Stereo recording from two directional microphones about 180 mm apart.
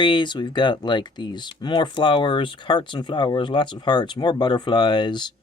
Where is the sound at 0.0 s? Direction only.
25° left (ahead or behind).